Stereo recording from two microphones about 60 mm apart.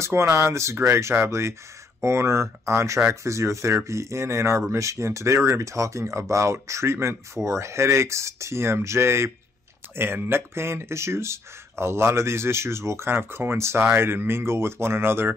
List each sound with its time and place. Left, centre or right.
0.0 s speech: right